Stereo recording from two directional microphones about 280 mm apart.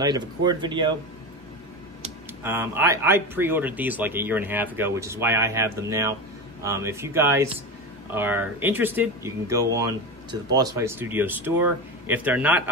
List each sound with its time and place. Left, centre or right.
0.0 s speech: centre
2.4 s speech: centre